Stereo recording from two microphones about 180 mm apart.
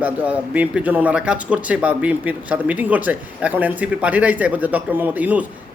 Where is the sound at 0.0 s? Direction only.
10° right (ahead or behind).